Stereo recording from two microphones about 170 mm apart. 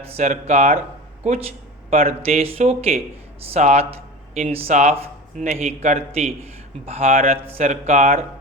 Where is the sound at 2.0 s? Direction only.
35° right (ahead or behind).